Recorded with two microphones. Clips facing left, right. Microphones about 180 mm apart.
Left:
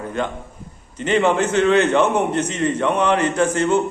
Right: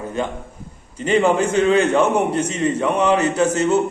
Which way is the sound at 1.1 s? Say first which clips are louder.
Right 1 dB; 35° right (ahead or behind).